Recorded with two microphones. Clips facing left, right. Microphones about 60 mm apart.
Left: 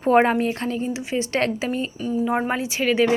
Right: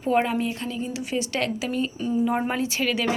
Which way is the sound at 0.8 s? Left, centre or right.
Left.